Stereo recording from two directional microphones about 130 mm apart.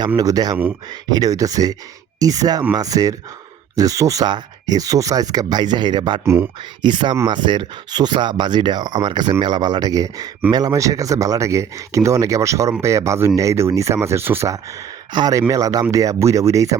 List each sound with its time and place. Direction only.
0.2 s speech: 30° right (ahead or behind)
6.2 s speech: 15° right (ahead or behind)
6.8 s speech: 35° right (ahead or behind)